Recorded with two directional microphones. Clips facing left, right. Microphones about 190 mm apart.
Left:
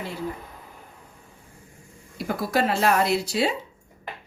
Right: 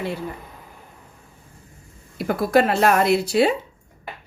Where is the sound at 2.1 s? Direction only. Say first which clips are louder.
Right 6 dB; 60° right (ahead or behind).